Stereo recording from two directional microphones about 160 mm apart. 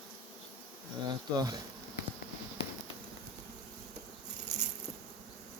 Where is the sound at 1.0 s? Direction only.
25° right (ahead or behind).